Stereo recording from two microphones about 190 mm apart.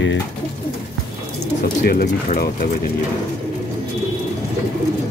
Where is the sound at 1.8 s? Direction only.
50° left (ahead or behind).